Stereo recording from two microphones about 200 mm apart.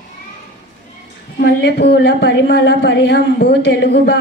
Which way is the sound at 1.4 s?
55° left (ahead or behind).